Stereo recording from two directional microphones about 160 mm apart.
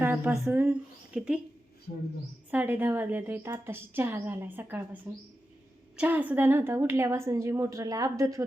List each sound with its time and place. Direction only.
0.0 s a woman's voice: 10° right (ahead or behind)
2.5 s a woman's voice: 10° right (ahead or behind)